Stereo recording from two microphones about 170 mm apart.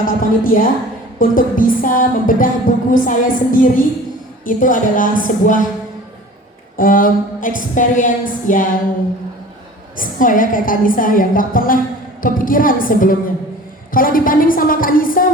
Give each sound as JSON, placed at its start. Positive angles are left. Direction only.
{"t": 0.0, "sound": "a woman's voice", "side_deg": 55}
{"t": 6.7, "sound": "a woman's voice", "side_deg": 55}
{"t": 10.0, "sound": "a woman's voice", "side_deg": 55}